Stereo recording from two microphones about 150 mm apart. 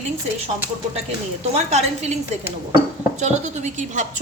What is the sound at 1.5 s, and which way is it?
Speech, 45° right (ahead or behind).